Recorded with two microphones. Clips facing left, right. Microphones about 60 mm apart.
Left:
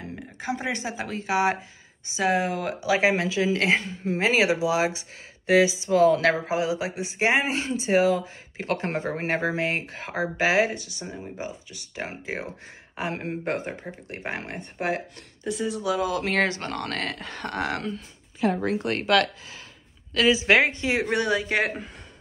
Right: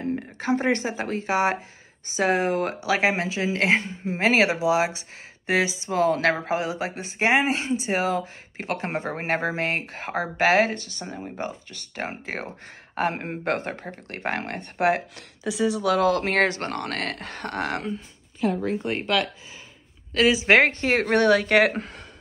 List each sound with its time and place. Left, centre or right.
0.4 s speech: right
13.1 s speech: right
13.5 s speech: right
15.8 s speech: right
16.2 s speech: right
18.4 s speech: centre
20.2 s speech: right